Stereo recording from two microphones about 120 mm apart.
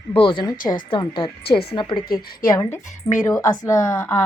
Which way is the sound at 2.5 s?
25° left (ahead or behind).